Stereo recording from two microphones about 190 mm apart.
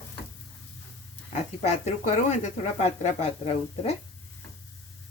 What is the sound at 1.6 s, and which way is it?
Speech, 35° left (ahead or behind).